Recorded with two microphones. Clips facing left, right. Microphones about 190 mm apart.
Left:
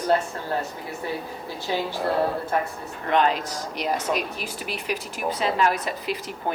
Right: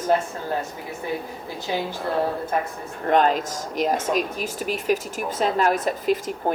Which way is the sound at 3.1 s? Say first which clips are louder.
Right 3 dB; 45° right (ahead or behind).